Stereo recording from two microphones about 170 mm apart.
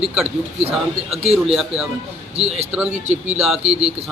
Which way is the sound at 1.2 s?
35° right (ahead or behind).